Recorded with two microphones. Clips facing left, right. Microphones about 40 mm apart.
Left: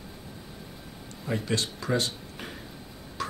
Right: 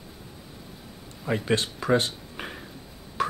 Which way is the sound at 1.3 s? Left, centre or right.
Right.